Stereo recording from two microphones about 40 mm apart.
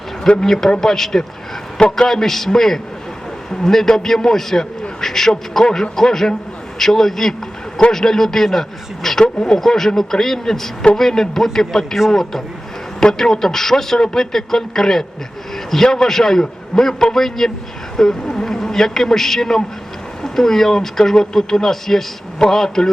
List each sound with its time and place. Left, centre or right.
0.4 s a man's voice: centre
9.2 s speech: left
9.6 s a man's voice: centre
13.0 s a man's voice: centre